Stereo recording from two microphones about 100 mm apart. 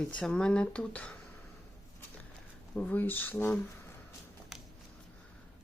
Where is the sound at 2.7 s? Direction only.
15° left (ahead or behind).